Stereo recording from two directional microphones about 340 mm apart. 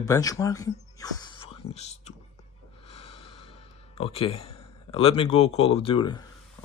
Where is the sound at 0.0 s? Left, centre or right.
Centre.